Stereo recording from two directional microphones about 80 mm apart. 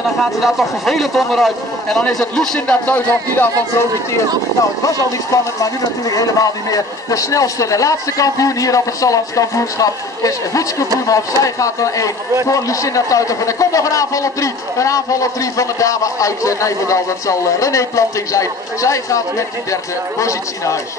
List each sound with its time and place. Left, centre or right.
0.2 s speech: centre
2.9 s speech: left
4.8 s a man's voice: left